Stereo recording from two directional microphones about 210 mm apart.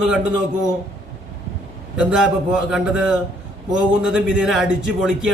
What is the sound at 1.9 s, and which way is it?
A man's voice, 5° right (ahead or behind).